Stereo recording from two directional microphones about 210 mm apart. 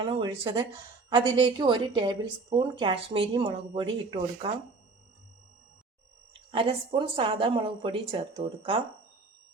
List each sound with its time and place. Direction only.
0.0 s a woman's voice: 25° right (ahead or behind)
6.5 s a woman's voice: 25° right (ahead or behind)